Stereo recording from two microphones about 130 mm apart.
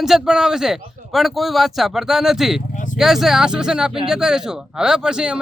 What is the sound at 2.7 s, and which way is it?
Vehicle, 90° left.